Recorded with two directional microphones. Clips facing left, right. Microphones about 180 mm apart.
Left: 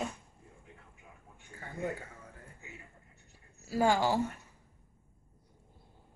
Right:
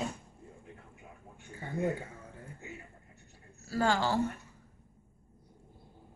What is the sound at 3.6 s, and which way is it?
Speech, 15° left (ahead or behind).